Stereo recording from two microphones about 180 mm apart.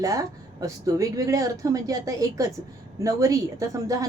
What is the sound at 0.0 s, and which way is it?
A woman's voice, 20° right (ahead or behind).